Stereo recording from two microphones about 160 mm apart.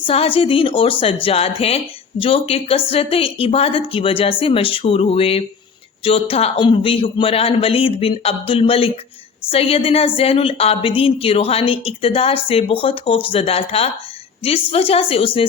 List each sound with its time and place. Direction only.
0.0 s speech: 35° left (ahead or behind)